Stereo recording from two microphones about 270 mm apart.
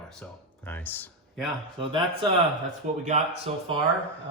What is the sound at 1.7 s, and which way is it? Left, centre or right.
Speech, centre.